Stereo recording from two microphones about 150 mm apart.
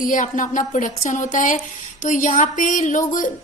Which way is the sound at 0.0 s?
60° left (ahead or behind).